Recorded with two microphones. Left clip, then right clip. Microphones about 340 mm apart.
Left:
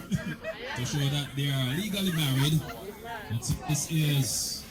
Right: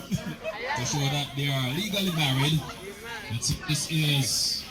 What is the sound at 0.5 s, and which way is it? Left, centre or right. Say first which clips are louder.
Speech: right 5 dB; centre.